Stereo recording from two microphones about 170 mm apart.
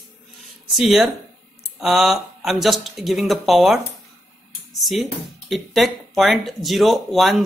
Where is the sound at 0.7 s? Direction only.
Centre (ahead or behind).